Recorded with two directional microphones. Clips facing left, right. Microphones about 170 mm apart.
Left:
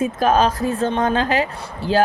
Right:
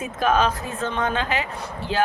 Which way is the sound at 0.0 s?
35° left (ahead or behind).